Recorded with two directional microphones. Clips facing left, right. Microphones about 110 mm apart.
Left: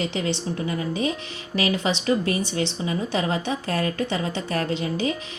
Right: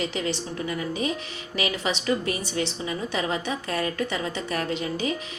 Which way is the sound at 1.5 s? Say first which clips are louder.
Left 4 dB; 35° left (ahead or behind).